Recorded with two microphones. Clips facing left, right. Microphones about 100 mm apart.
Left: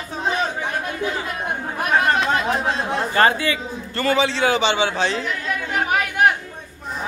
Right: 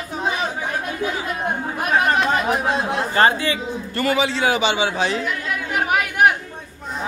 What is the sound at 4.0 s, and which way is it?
A man's voice, 30° left (ahead or behind).